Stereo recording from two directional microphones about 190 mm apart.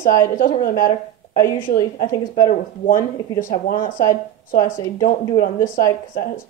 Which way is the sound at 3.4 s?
45° left (ahead or behind).